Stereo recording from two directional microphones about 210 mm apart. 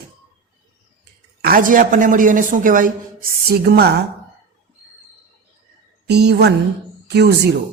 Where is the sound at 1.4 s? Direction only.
45° right (ahead or behind).